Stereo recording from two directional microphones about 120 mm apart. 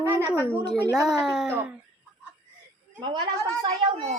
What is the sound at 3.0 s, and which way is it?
Speech, 40° right (ahead or behind).